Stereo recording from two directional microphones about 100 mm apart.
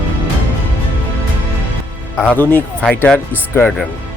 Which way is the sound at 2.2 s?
15° left (ahead or behind).